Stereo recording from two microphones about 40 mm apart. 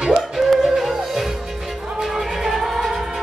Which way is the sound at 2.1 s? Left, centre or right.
Centre.